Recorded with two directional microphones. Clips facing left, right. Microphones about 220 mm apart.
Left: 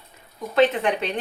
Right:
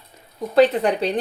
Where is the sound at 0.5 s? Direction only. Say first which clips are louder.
Right 3 dB; 35° right (ahead or behind).